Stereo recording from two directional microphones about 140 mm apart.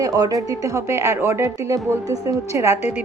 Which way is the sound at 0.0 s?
25° right (ahead or behind).